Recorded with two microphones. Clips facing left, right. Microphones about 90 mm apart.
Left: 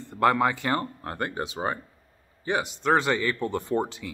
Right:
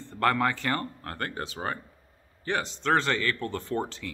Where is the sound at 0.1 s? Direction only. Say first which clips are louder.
Left 3 dB; 15° left (ahead or behind).